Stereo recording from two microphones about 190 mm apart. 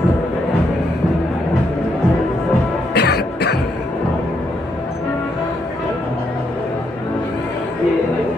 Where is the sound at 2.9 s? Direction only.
60° left (ahead or behind).